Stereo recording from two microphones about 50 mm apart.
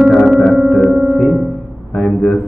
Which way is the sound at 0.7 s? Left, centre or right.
Left.